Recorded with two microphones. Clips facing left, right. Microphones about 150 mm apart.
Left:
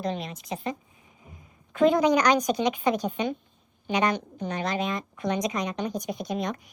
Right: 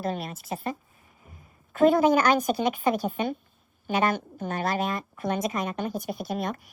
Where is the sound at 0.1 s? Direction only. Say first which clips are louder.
Even; 50° right (ahead or behind).